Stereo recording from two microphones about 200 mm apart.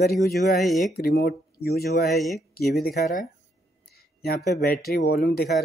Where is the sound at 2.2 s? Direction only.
Centre (ahead or behind).